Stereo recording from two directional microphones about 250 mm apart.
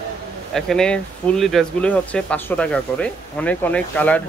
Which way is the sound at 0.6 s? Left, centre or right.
Centre.